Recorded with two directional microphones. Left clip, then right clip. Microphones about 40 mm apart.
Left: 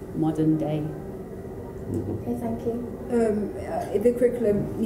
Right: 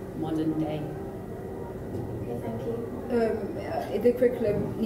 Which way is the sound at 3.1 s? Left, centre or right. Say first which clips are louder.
Left 3 dB; left.